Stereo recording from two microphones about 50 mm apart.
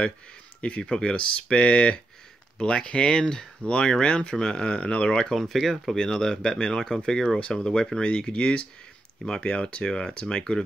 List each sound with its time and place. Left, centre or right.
0.6 s speech: left
5.4 s speech: centre
5.9 s speech: centre